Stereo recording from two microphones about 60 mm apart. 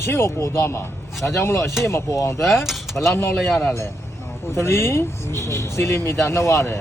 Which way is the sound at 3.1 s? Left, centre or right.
Left.